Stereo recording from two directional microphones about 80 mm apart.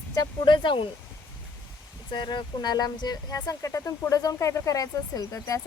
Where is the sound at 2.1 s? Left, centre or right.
Left.